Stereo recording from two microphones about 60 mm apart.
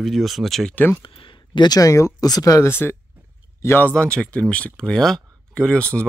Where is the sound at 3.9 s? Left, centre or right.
Centre.